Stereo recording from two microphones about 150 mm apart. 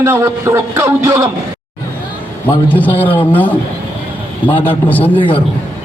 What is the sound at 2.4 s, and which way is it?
A man's voice, 10° left (ahead or behind).